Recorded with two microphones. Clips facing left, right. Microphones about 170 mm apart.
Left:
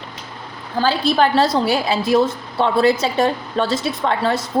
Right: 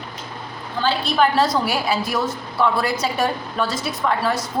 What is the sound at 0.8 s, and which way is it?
A woman's voice, 30° left (ahead or behind).